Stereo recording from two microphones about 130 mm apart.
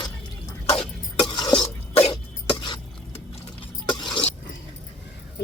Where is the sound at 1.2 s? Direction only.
35° left (ahead or behind).